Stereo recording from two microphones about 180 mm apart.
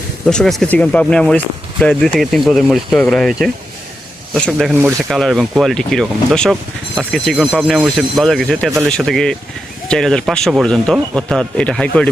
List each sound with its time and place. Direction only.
0.3 s speech: 5° left (ahead or behind)
4.7 s speech: 10° right (ahead or behind)
5.1 s speech: centre (ahead or behind)